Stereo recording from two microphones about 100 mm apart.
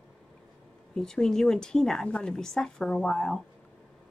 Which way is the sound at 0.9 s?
5° left (ahead or behind).